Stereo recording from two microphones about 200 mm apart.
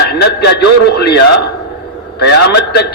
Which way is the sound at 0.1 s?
55° left (ahead or behind).